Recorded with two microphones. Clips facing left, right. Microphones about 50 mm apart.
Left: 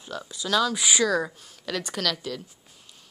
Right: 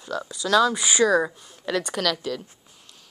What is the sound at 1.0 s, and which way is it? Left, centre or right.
A woman's voice, centre.